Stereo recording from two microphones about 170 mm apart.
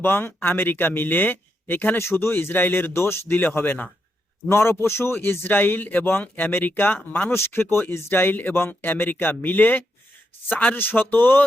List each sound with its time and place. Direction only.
0.0 s a man's voice: 15° left (ahead or behind)